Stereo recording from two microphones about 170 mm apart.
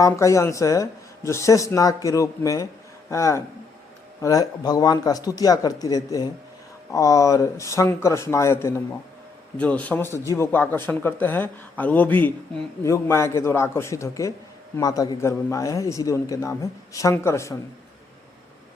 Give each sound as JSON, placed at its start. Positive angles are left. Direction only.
{"t": 0.0, "sound": "a man's voice", "side_deg": 15}